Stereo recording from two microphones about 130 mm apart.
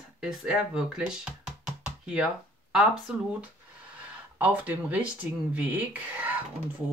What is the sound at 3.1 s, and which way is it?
Speech, 10° right (ahead or behind).